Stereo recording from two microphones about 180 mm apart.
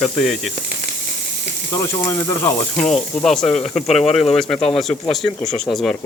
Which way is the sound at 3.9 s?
35° left (ahead or behind).